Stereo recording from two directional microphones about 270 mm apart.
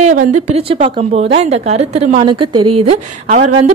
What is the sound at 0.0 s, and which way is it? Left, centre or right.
A woman's voice, right.